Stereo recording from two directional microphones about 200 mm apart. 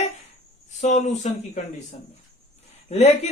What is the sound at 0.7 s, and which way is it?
Speech, 35° left (ahead or behind).